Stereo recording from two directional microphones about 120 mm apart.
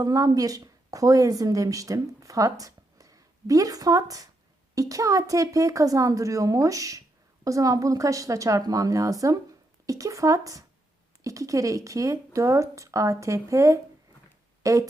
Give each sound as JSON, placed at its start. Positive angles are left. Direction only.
{"t": 0.0, "sound": "speech", "side_deg": -30}